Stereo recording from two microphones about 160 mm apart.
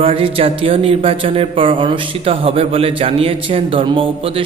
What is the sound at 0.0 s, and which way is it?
A man's voice, 35° right (ahead or behind).